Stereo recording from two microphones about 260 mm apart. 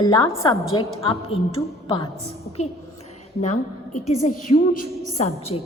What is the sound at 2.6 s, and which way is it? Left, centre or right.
A woman's voice, left.